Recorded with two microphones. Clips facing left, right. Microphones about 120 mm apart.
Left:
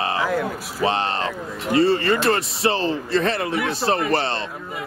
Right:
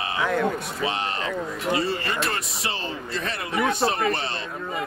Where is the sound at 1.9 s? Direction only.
30° left (ahead or behind).